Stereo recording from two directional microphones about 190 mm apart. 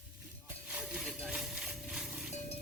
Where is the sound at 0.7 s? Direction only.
5° right (ahead or behind).